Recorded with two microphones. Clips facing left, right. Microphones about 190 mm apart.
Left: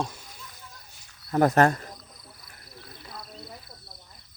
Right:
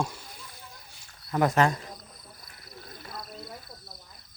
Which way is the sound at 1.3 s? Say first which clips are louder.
Left 3 dB; 40° left (ahead or behind).